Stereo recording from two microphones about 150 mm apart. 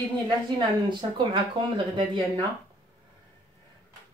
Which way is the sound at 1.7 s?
35° right (ahead or behind).